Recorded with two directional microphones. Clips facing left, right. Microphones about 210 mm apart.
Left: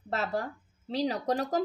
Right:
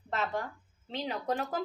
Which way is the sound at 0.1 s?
40° left (ahead or behind).